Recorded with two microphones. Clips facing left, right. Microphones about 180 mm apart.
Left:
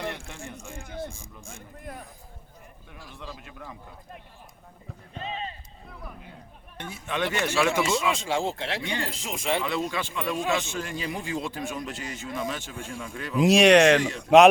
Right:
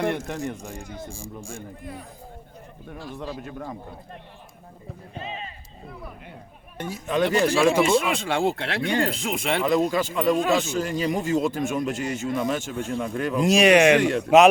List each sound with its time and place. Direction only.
0.0 s a sound: 55° right (ahead or behind)
1.1 s speech: 30° right (ahead or behind)
3.0 s a man's voice: 65° right (ahead or behind)
3.4 s speech: 45° right (ahead or behind)
5.2 s speech: 35° left (ahead or behind)
6.9 s speech: 40° right (ahead or behind)
7.9 s speech: 60° right (ahead or behind)
9.9 s speech: 40° right (ahead or behind)
13.4 s speech: centre (ahead or behind)
14.0 s speech: 65° right (ahead or behind)